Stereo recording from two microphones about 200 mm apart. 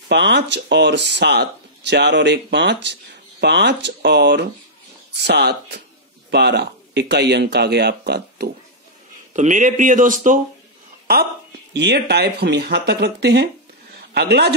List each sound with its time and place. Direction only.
0.1 s speech: 60° right (ahead or behind)
9.3 s speech: 40° right (ahead or behind)
11.7 s speech: 60° right (ahead or behind)